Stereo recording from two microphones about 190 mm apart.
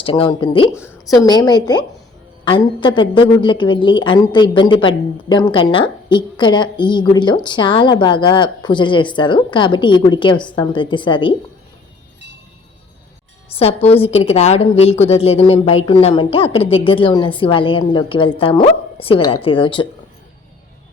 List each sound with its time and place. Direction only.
0.0 s a woman's voice: 30° left (ahead or behind)
13.6 s a woman's voice: 30° left (ahead or behind)